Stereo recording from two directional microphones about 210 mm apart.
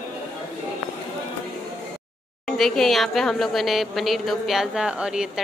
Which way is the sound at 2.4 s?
Centre (ahead or behind).